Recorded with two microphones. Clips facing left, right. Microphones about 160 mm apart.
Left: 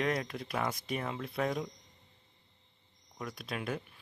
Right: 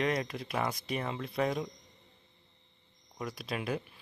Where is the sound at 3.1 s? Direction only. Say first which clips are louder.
Right 2 dB; centre (ahead or behind).